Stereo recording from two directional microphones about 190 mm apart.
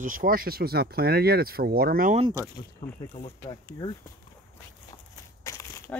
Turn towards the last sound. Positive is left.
turn(degrees=15)  # may be behind; listen again after turning